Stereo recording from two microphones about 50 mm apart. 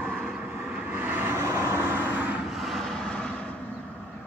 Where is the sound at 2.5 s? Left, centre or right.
Centre.